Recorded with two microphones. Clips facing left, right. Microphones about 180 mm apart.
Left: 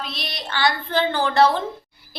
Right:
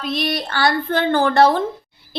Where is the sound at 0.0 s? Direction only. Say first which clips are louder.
Right 10 dB; 50° right (ahead or behind).